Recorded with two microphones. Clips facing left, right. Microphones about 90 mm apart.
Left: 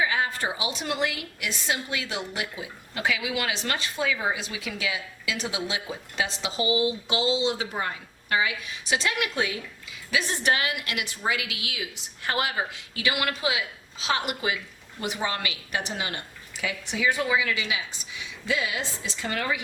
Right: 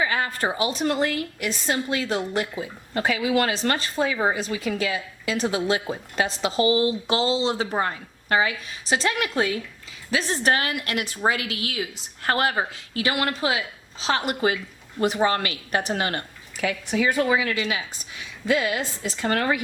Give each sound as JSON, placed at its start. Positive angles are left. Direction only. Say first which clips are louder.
{"t": 0.0, "sound": "a woman's voice", "louder": "right 2 dB", "side_deg": -50}